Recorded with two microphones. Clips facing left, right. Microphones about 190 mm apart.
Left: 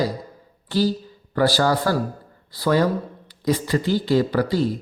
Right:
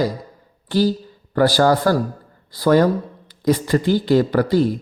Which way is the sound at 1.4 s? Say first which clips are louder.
Right 4 dB; 50° right (ahead or behind).